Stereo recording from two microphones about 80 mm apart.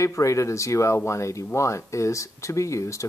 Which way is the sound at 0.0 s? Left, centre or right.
Left.